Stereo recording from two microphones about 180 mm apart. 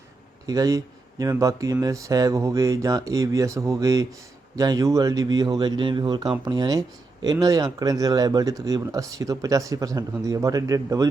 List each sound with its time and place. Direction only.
0.4 s speech: 20° right (ahead or behind)